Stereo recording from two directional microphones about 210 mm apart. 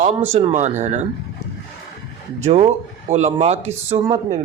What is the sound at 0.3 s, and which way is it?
Speech, 35° right (ahead or behind).